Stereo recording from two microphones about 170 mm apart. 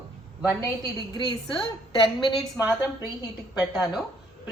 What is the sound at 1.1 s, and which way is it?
A woman's voice, 30° left (ahead or behind).